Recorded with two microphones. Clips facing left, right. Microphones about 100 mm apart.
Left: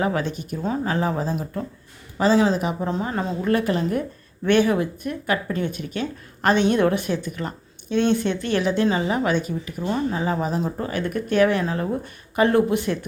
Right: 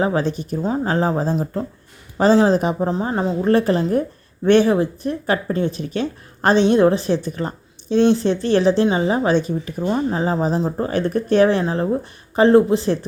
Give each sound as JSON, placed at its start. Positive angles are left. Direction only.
{"t": 0.0, "sound": "speech", "side_deg": -30}
{"t": 2.9, "sound": "speech", "side_deg": -25}